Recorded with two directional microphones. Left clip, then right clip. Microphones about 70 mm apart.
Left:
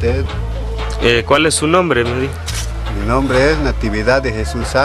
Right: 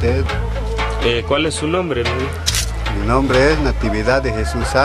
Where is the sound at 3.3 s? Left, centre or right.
Centre.